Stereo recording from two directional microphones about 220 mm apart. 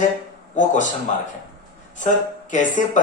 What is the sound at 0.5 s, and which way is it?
Speech, 35° left (ahead or behind).